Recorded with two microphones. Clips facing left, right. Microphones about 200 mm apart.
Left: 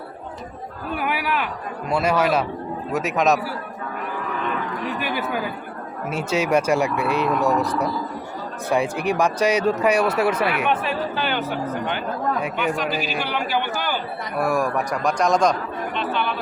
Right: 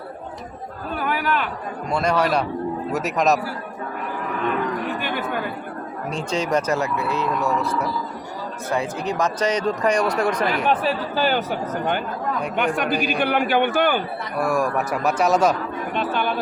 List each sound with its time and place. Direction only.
0.9 s a sound: 10° left (ahead or behind)
1.9 s a man's voice: 5° left (ahead or behind)
4.9 s a sound: 5° left (ahead or behind)
6.1 s speech: 5° left (ahead or behind)
8.7 s speech: 15° left (ahead or behind)
10.7 s speech: 35° right (ahead or behind)
12.5 s a man's voice: 55° right (ahead or behind)
14.3 s a man's voice: centre (ahead or behind)
16.0 s speech: 45° right (ahead or behind)